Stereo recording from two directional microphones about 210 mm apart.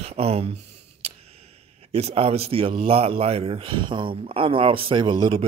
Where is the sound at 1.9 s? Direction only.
30° right (ahead or behind).